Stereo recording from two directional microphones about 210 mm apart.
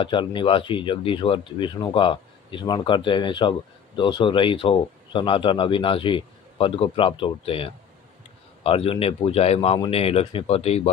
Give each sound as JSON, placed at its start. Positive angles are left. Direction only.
{"t": 0.0, "sound": "speech", "side_deg": 25}